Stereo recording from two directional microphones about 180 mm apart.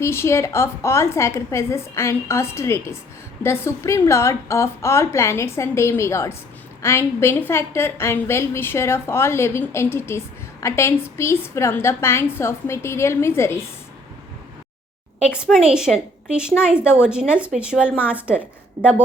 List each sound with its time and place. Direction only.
0.0 s a woman's voice: 15° left (ahead or behind)
15.4 s a woman's voice: 5° right (ahead or behind)
18.8 s a woman's voice: 35° right (ahead or behind)